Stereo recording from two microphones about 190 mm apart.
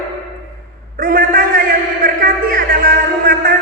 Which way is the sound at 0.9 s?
45° right (ahead or behind).